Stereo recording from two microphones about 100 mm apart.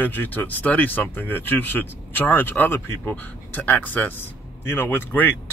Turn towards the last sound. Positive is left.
turn(degrees=20)  # may be behind; listen again after turning